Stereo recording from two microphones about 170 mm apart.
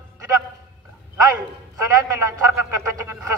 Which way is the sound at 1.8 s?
20° right (ahead or behind).